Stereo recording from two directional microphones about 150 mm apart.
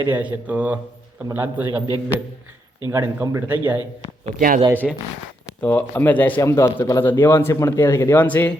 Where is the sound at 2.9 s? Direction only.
20° right (ahead or behind).